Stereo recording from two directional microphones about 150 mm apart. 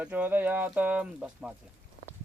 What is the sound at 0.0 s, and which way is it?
Speech, 10° right (ahead or behind).